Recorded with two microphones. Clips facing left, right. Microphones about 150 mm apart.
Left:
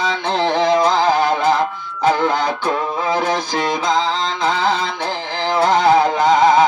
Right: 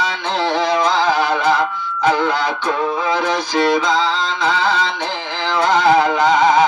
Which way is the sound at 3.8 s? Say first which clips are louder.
Even; 45° left (ahead or behind).